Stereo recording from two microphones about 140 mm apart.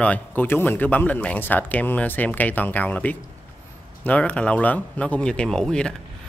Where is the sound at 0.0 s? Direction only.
10° left (ahead or behind).